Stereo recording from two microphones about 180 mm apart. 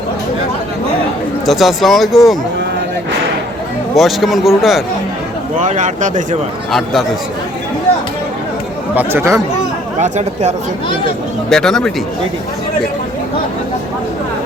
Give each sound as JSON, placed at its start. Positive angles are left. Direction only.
{"t": 1.5, "sound": "speech", "side_deg": 0}
{"t": 3.9, "sound": "speech", "side_deg": 0}
{"t": 5.5, "sound": "speech", "side_deg": -45}
{"t": 6.7, "sound": "speech", "side_deg": 0}
{"t": 9.0, "sound": "speech", "side_deg": -15}
{"t": 10.0, "sound": "speech", "side_deg": -40}
{"t": 11.4, "sound": "speech", "side_deg": 5}